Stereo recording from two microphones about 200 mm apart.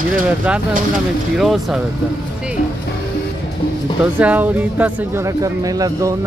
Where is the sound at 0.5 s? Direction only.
5° right (ahead or behind).